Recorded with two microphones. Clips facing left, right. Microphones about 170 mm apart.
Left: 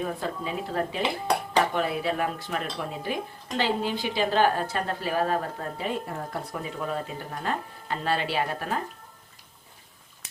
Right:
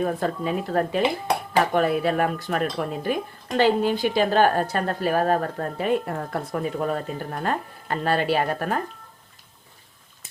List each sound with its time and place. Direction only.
0.0 s a woman's voice: 50° right (ahead or behind)